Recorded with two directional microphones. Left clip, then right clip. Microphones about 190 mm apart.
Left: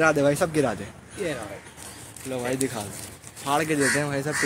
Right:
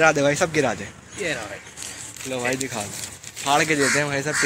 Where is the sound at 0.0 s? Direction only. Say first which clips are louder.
Right 3 dB; 10° right (ahead or behind).